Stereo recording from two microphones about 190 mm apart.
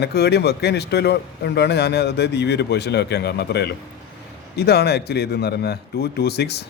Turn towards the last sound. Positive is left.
turn(degrees=60)  # may be behind; listen again after turning